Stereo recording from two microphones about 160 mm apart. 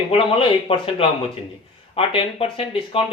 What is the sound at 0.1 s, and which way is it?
Speech, 35° left (ahead or behind).